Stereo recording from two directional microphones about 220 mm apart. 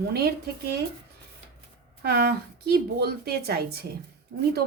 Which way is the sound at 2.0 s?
45° right (ahead or behind).